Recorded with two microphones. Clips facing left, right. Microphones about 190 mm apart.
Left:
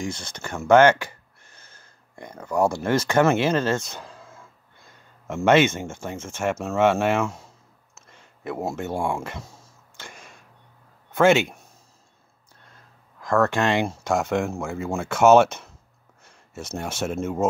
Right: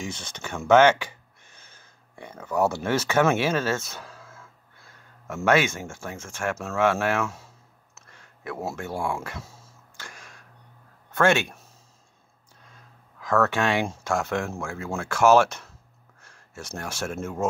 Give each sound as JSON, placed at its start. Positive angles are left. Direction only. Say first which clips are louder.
{"t": 0.0, "sound": "speech", "louder": "left 3 dB", "side_deg": 10}
{"t": 2.4, "sound": "speech", "louder": "left 2 dB", "side_deg": 15}
{"t": 8.1, "sound": "a sound", "louder": "left 4 dB", "side_deg": 20}
{"t": 11.1, "sound": "speech", "louder": "left 4 dB", "side_deg": 20}
{"t": 13.3, "sound": "speech", "louder": "left 2 dB", "side_deg": 15}